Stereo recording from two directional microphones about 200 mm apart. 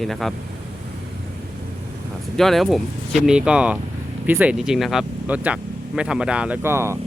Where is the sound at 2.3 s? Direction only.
Centre (ahead or behind).